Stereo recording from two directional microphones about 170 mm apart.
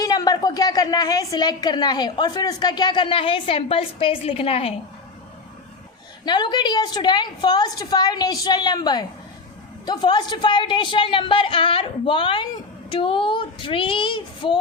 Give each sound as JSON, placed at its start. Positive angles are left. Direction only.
{"t": 0.0, "sound": "a woman's voice", "side_deg": 20}
{"t": 6.2, "sound": "a woman's voice", "side_deg": 25}